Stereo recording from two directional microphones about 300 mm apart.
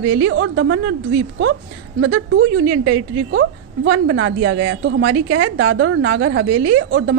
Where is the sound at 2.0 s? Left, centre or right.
Right.